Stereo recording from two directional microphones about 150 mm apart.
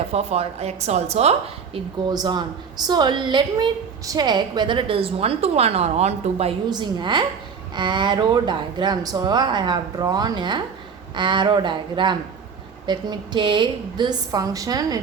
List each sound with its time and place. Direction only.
0.1 s a woman's voice: 40° right (ahead or behind)
2.0 s a woman's voice: 30° right (ahead or behind); by 6.6 s 45° right (ahead or behind)
6.7 s a woman's voice: 30° right (ahead or behind)